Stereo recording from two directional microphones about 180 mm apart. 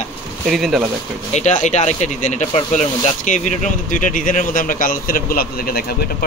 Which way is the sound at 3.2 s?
45° left (ahead or behind).